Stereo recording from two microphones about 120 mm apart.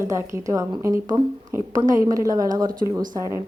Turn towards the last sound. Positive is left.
turn(degrees=-25)  # may be behind; listen again after turning